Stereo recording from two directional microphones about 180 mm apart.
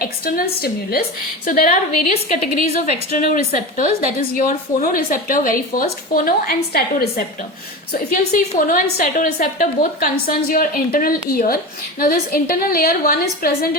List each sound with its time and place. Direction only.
0.0 s a woman's voice: 55° left (ahead or behind)